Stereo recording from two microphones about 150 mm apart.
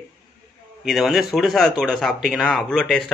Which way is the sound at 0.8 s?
Centre (ahead or behind).